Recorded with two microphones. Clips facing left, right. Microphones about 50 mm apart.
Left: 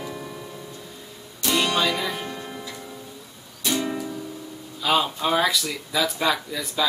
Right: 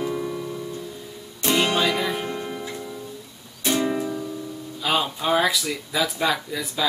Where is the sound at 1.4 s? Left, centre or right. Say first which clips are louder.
Right 1 dB; right.